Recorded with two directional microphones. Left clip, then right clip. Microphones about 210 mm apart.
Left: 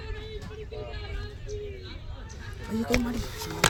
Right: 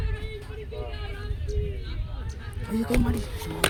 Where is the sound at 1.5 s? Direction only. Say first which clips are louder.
Right 2 dB; 55° right (ahead or behind).